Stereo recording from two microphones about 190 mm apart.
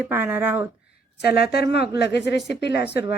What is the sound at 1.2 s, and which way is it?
A woman's voice, 60° left (ahead or behind).